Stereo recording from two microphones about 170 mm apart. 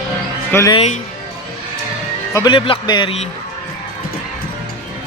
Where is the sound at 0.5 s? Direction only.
20° left (ahead or behind).